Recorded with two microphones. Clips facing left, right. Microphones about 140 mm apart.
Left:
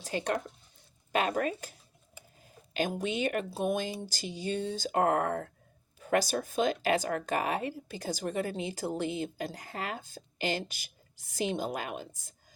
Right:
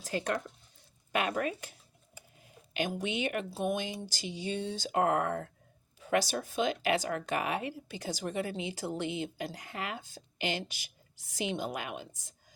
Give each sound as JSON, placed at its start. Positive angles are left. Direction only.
{"t": 0.0, "sound": "speech", "side_deg": 25}
{"t": 1.1, "sound": "a woman's voice", "side_deg": 35}